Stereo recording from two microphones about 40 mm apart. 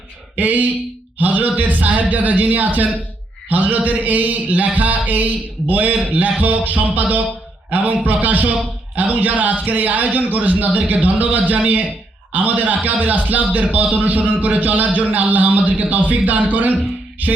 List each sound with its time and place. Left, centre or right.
0.3 s a man's voice: right